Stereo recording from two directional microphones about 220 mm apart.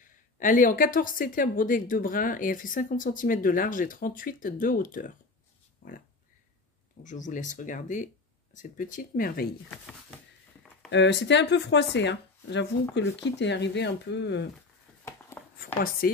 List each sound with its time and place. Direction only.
0.0 s a woman's voice: 35° left (ahead or behind)
10.9 s speech: 55° left (ahead or behind)
15.0 s a sound: 10° left (ahead or behind)
16.0 s a woman's voice: 40° left (ahead or behind)